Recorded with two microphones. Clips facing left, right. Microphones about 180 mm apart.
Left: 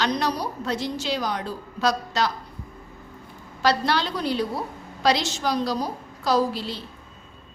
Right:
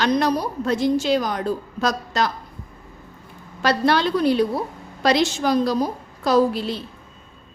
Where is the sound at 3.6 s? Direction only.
55° right (ahead or behind).